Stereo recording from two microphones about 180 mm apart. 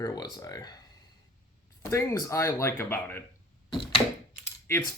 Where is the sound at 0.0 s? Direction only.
20° left (ahead or behind).